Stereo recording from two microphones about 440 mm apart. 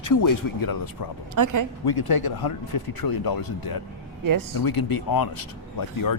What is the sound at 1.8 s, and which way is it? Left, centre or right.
A man's voice, left.